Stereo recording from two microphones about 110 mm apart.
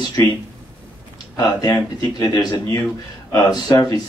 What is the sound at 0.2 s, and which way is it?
Speech, 30° left (ahead or behind).